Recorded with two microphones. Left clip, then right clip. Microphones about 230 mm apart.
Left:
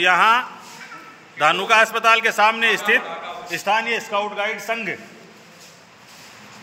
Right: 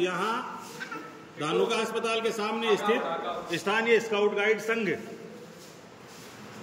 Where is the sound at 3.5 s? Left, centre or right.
Centre.